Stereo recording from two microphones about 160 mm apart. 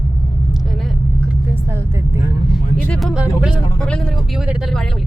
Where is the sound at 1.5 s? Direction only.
15° right (ahead or behind).